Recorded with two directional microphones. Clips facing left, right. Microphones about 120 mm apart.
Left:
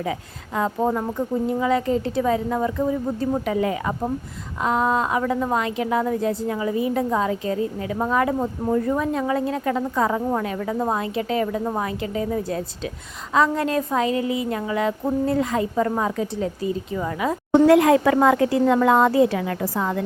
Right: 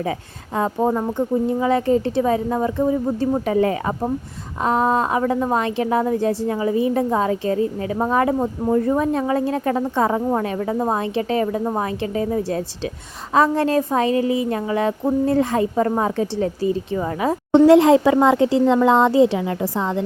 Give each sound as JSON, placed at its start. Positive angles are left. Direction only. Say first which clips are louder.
{"t": 0.0, "sound": "a woman's voice", "louder": "right 2 dB", "side_deg": -30}
{"t": 3.4, "sound": "a woman's voice", "louder": "right 4 dB", "side_deg": -35}